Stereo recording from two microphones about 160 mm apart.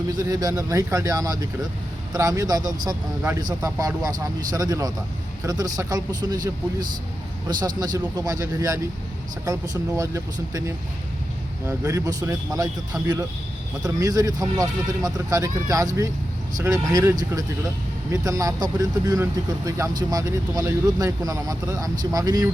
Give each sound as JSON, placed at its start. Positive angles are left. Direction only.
{"t": 0.2, "sound": "speech", "side_deg": -25}